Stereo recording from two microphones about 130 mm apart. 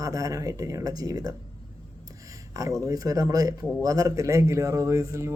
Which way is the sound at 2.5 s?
25° right (ahead or behind).